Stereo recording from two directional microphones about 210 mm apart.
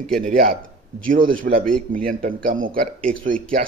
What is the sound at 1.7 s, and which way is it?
Speech, 5° left (ahead or behind).